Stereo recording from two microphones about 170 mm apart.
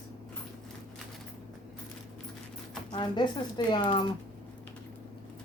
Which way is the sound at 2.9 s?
25° left (ahead or behind).